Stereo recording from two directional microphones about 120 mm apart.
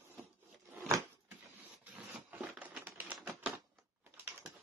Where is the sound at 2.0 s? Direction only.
10° right (ahead or behind).